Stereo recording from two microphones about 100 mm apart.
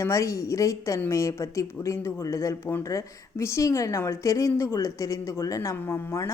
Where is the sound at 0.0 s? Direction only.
30° left (ahead or behind).